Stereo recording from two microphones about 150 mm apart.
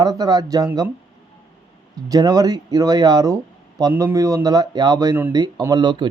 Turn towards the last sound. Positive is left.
turn(degrees=-30)  # may be behind; listen again after turning